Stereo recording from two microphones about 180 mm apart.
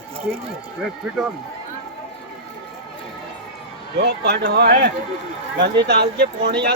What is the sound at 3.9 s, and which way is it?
Speech, 65° right (ahead or behind).